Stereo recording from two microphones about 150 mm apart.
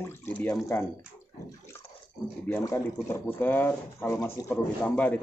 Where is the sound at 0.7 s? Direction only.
10° left (ahead or behind).